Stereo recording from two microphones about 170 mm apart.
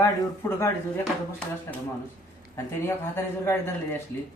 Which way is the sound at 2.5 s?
15° left (ahead or behind).